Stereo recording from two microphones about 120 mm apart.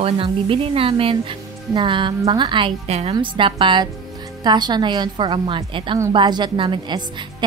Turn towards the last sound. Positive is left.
turn(degrees=-40)  # may be behind; listen again after turning